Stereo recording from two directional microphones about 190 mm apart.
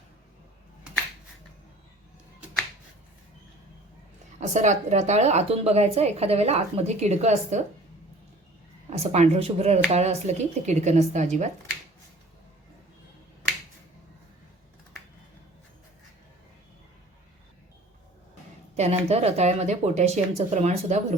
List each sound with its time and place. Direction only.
4.4 s speech: 40° right (ahead or behind)
8.9 s speech: 35° right (ahead or behind)
18.8 s speech: 35° right (ahead or behind)